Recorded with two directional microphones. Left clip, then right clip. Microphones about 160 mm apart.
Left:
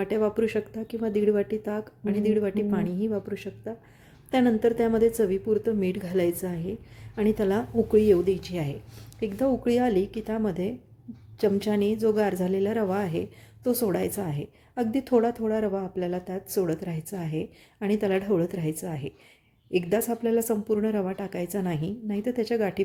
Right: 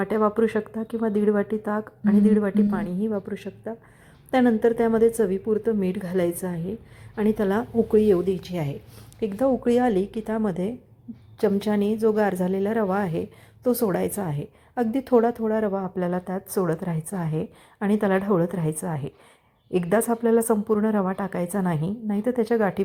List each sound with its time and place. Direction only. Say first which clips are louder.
0.0 s a woman's voice: right 3 dB; centre (ahead or behind)
3.3 s a woman's voice: right 1 dB; 20° left (ahead or behind)
4.3 s a woman's voice: right 3 dB; centre (ahead or behind)